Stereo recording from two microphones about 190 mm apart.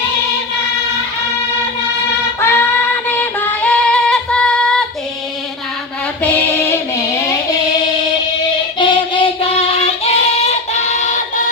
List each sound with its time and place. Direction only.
2.4 s female singing: 10° left (ahead or behind)
6.2 s a sound: 10° left (ahead or behind)
8.8 s singing: 25° left (ahead or behind)